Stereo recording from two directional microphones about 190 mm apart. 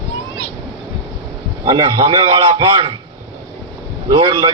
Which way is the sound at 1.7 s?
25° right (ahead or behind).